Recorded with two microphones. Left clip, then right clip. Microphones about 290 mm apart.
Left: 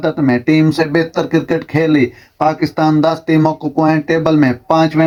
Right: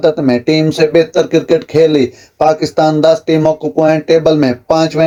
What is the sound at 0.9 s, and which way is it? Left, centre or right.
Speech, left.